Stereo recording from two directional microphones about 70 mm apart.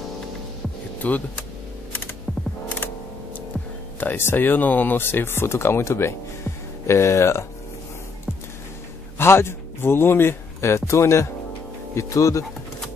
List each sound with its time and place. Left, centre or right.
1.0 s speech: left
4.0 s speech: left
9.2 s a man's voice: left